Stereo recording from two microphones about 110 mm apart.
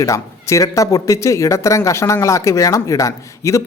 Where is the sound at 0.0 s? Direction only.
30° left (ahead or behind).